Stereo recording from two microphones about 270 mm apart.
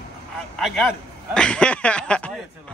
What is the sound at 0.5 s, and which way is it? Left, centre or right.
A man's voice, centre.